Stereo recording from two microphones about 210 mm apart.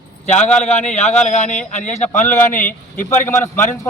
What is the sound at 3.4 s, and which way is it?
Speech, 10° left (ahead or behind).